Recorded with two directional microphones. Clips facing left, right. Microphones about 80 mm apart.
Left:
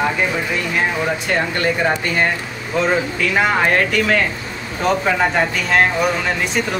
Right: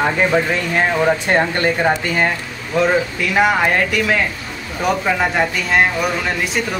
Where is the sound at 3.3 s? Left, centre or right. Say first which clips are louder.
Right 1 dB; centre.